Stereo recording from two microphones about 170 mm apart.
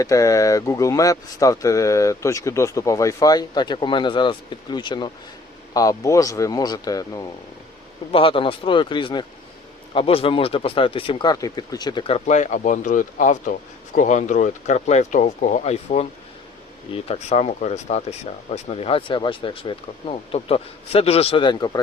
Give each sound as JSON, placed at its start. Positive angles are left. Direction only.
{"t": 0.0, "sound": "speech", "side_deg": 20}
{"t": 8.1, "sound": "speech", "side_deg": 30}